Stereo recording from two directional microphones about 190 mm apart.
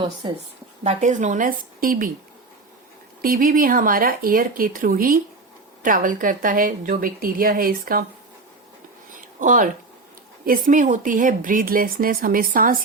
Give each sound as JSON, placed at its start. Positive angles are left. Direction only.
{"t": 0.9, "sound": "speech", "side_deg": -40}
{"t": 3.2, "sound": "speech", "side_deg": -45}
{"t": 9.1, "sound": "a sound", "side_deg": -45}
{"t": 10.4, "sound": "speech", "side_deg": -45}